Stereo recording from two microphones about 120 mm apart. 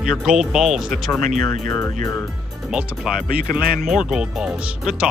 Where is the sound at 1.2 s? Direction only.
90° right.